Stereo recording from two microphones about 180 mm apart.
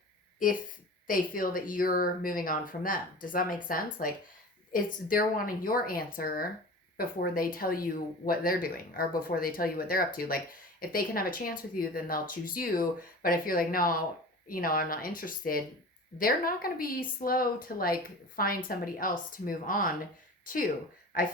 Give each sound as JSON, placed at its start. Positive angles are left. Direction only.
{"t": 0.3, "sound": "speech", "side_deg": 50}